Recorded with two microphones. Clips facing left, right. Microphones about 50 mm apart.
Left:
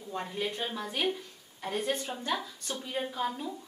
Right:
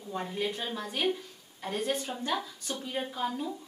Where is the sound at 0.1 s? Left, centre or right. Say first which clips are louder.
Right 1 dB; centre.